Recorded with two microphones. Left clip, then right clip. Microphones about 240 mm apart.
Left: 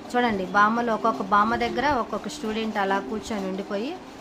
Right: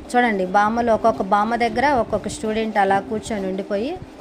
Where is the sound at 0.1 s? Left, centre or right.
Centre.